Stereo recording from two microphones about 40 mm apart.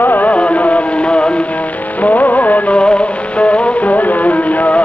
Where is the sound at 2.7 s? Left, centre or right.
Left.